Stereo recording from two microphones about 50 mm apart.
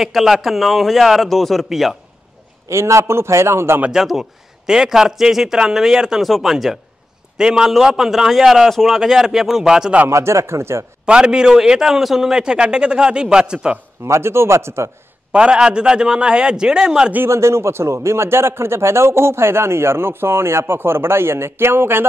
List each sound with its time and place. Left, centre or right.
0.0 s a man's voice: centre
2.7 s a man's voice: right
3.9 s a man's voice: centre
10.0 s a man's voice: right
11.1 s a man's voice: centre
14.0 s a man's voice: right
15.3 s a man's voice: centre
17.3 s a man's voice: right